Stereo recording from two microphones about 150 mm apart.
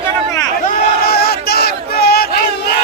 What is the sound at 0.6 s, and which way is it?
Battle cry, 90° left.